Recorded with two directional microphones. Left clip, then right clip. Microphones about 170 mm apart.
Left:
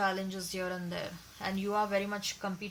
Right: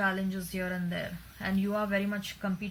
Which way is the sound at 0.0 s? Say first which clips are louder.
Right 1 dB; 40° left (ahead or behind).